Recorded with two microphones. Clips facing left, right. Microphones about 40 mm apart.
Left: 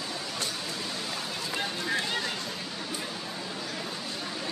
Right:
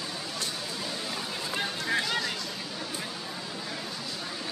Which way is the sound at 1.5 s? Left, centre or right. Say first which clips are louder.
Right 1 dB; centre.